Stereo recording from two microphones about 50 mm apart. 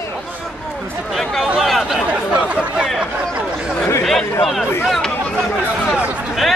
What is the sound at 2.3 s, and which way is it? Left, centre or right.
Chatter, right.